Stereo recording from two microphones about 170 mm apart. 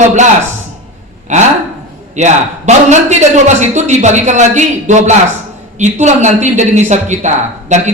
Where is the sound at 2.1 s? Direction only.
45° right (ahead or behind).